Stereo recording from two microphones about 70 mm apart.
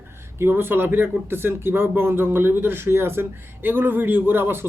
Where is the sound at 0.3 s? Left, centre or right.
Right.